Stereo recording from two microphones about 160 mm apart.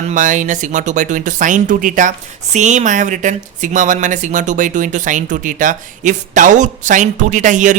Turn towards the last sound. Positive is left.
turn(degrees=-50)  # may be behind; listen again after turning